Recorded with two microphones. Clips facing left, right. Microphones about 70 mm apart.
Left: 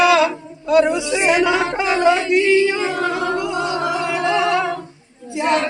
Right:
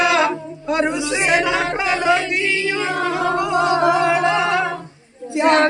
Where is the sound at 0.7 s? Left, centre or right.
Right.